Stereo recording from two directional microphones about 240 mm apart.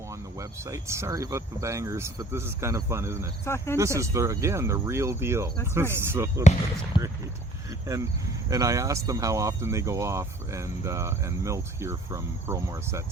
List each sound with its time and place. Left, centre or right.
0.3 s speech: centre
3.4 s speech: centre
3.8 s speech: centre
8.4 s speech: centre